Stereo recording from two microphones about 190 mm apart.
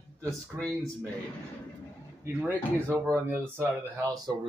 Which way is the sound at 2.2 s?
10° right (ahead or behind).